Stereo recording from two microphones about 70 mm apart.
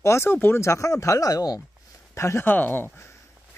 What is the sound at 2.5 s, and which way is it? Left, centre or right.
Speech, left.